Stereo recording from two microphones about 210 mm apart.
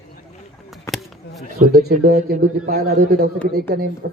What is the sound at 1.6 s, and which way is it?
A man's voice, 45° right (ahead or behind).